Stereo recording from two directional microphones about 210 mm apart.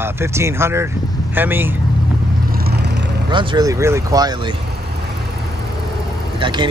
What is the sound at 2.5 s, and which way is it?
Vehicle, 50° right (ahead or behind).